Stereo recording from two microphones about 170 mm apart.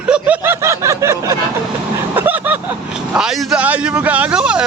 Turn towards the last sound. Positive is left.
turn(degrees=-5)  # may be behind; listen again after turning